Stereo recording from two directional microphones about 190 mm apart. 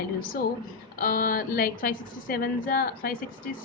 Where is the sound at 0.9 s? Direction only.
50° left (ahead or behind).